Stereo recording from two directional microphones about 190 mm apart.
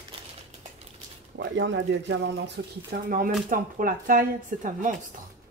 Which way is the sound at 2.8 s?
50° right (ahead or behind).